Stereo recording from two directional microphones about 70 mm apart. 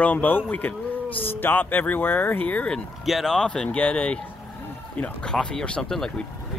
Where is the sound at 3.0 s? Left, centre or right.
Centre.